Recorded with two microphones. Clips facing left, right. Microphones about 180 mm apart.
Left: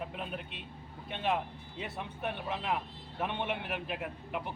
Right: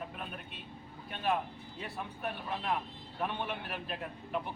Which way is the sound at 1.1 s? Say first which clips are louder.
Even; 20° left (ahead or behind).